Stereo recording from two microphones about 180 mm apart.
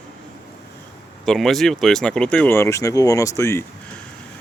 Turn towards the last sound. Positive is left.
turn(degrees=15)  # may be behind; listen again after turning